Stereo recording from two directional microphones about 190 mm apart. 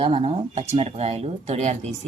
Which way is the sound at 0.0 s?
30° right (ahead or behind).